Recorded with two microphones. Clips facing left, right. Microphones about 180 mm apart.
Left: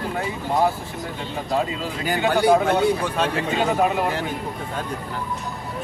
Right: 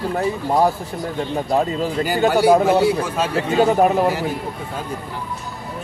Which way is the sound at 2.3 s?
5° right (ahead or behind).